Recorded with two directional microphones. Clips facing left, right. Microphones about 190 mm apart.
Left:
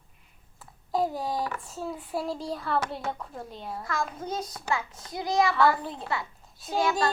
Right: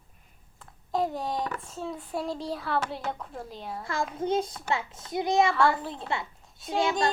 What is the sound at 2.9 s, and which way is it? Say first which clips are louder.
Speech: even; centre (ahead or behind).